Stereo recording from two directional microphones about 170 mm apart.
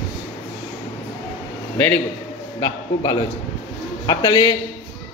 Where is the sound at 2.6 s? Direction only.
25° left (ahead or behind).